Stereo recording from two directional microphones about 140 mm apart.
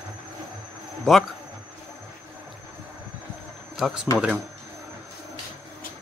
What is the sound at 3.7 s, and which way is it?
Speech, 5° right (ahead or behind).